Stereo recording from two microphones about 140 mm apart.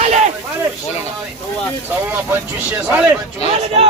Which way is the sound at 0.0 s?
55° right (ahead or behind).